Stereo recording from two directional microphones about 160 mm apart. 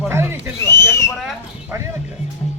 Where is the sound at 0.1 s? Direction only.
15° right (ahead or behind).